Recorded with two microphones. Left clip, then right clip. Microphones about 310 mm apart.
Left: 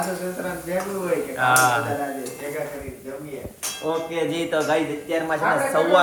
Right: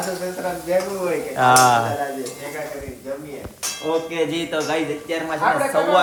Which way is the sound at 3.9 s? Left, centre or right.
Centre.